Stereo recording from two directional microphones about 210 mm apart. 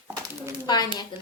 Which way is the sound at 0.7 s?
20° left (ahead or behind).